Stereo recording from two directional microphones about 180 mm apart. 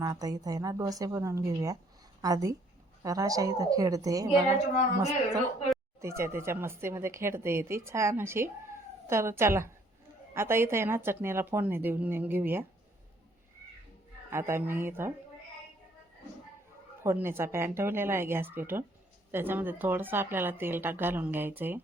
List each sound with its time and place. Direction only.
0.0 s a woman's voice: 20° right (ahead or behind)
6.0 s speech: 15° right (ahead or behind)
14.3 s speech: 15° right (ahead or behind)
17.0 s speech: 15° right (ahead or behind)